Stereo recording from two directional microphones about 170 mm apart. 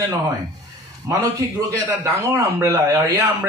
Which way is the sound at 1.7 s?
20° right (ahead or behind).